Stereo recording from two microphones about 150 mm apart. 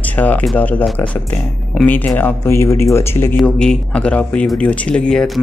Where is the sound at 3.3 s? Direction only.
5° left (ahead or behind).